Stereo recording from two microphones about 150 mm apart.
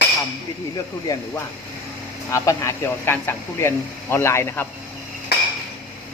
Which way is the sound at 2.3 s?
20° left (ahead or behind).